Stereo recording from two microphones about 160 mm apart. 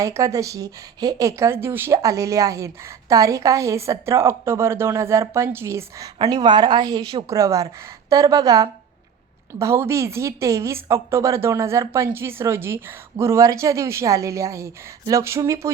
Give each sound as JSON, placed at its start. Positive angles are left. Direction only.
{"t": 0.0, "sound": "a woman's voice", "side_deg": -20}